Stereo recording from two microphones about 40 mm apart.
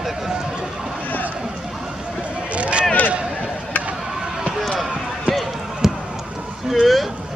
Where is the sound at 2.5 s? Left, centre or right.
Right.